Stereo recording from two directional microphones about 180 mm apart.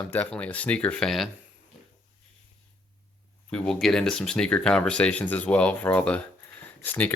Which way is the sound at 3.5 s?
5° left (ahead or behind).